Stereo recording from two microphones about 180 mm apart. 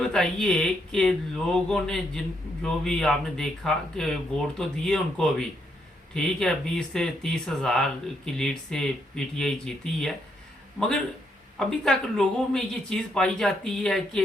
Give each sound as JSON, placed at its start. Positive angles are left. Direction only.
{"t": 0.0, "sound": "speech", "side_deg": 5}